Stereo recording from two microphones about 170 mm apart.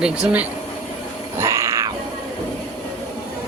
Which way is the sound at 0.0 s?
5° right (ahead or behind).